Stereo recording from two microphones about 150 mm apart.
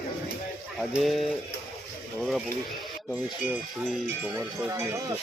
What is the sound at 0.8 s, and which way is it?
Speech, centre (ahead or behind).